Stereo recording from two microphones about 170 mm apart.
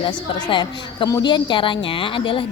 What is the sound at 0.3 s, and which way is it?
A woman's voice, 25° left (ahead or behind).